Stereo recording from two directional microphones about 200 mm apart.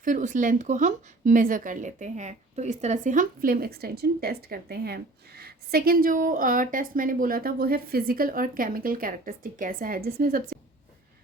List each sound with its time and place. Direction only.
0.0 s speech: 40° right (ahead or behind)